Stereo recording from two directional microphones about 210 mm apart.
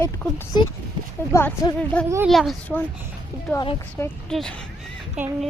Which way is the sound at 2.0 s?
10° right (ahead or behind).